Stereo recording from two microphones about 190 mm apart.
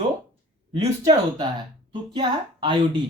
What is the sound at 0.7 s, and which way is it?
Speech, 25° right (ahead or behind).